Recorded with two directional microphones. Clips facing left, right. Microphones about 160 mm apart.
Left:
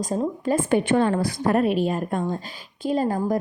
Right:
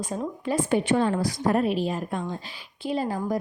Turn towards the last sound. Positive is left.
turn(degrees=45)  # may be behind; listen again after turning